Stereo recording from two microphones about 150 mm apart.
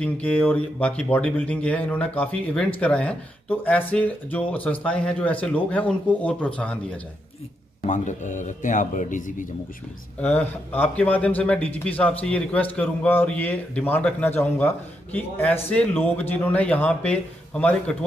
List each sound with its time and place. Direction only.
0.0 s speech: 10° left (ahead or behind)
7.8 s a man's voice: 55° left (ahead or behind)
10.2 s speech: 10° left (ahead or behind)